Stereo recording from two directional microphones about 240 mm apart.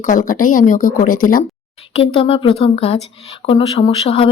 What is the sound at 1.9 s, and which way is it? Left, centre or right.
Speech, left.